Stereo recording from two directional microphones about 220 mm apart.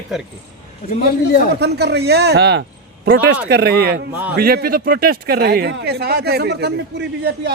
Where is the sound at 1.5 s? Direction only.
50° right (ahead or behind).